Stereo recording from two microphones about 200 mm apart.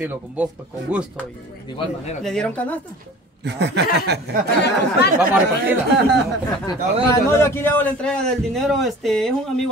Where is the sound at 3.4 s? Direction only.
60° right (ahead or behind).